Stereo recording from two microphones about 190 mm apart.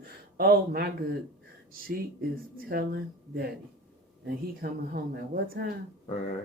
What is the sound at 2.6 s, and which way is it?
Speech, 55° right (ahead or behind).